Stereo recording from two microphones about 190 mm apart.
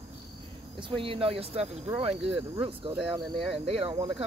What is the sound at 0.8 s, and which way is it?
Speech, 30° right (ahead or behind).